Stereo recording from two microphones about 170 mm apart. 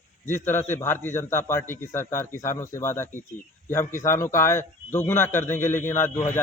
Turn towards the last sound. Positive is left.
turn(degrees=15)  # may be behind; listen again after turning